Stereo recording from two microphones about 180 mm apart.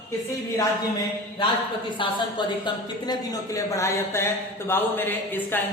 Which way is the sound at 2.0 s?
30° left (ahead or behind).